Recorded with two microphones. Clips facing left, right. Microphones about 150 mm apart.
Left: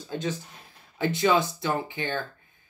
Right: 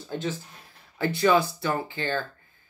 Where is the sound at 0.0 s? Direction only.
15° left (ahead or behind).